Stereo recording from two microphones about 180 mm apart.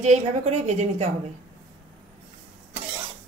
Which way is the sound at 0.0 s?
40° right (ahead or behind).